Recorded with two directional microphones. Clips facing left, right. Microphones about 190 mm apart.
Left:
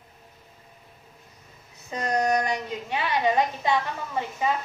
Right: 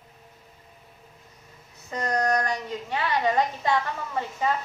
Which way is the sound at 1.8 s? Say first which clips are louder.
Left 1 dB; 20° left (ahead or behind).